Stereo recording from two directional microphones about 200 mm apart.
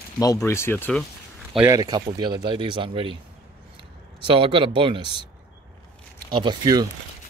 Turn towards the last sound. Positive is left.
turn(degrees=-20)  # may be behind; listen again after turning